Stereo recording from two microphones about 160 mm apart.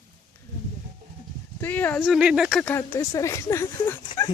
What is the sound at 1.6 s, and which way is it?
Speech, 10° left (ahead or behind).